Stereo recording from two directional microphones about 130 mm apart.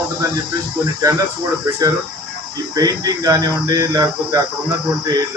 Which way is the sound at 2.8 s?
30° right (ahead or behind).